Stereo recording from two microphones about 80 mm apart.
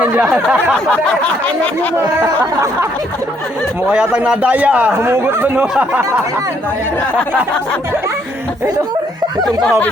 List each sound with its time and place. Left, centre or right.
0.0 s a sound: centre
3.8 s a man's voice: centre
4.9 s speech: right